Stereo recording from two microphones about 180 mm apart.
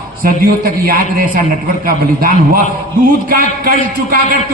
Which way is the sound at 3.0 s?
50° right (ahead or behind).